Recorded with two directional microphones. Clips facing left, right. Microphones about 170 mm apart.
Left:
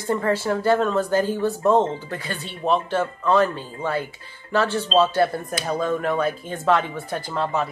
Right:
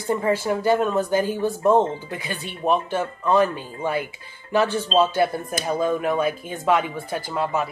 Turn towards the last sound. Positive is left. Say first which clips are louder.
# even
turn(degrees=-10)  # may be behind; listen again after turning